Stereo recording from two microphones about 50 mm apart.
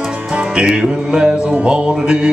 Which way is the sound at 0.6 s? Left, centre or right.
Centre.